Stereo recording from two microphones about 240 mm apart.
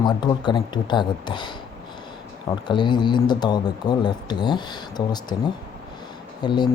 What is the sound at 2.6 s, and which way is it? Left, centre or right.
Speech, centre.